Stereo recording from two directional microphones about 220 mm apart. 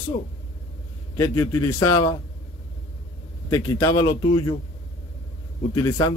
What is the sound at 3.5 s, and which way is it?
Speech, 15° left (ahead or behind).